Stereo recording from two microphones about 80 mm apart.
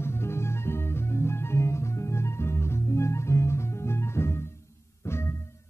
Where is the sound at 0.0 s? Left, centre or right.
Left.